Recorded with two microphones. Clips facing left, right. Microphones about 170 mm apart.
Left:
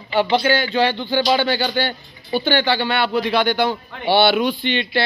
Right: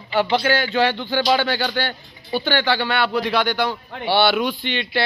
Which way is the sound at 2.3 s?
Centre (ahead or behind).